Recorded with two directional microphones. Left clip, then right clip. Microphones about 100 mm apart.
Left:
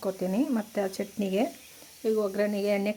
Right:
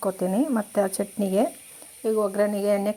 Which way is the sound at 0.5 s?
10° right (ahead or behind).